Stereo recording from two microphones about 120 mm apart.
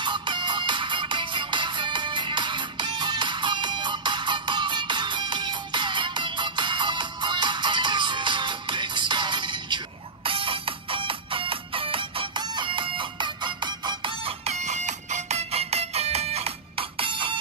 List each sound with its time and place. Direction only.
0.0 s music: 40° right (ahead or behind)
14.4 s music: 65° right (ahead or behind); by 17.4 s 45° right (ahead or behind)